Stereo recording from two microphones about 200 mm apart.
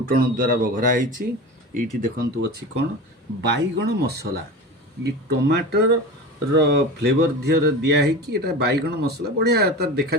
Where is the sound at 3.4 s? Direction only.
60° right (ahead or behind).